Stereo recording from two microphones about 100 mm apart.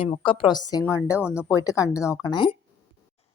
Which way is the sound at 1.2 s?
10° right (ahead or behind).